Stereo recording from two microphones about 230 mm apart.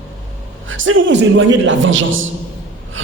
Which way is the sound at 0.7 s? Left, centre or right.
Right.